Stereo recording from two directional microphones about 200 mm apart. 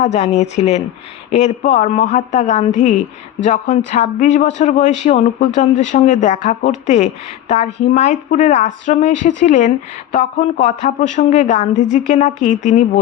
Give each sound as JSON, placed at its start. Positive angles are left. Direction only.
{"t": 0.0, "sound": "speech", "side_deg": 35}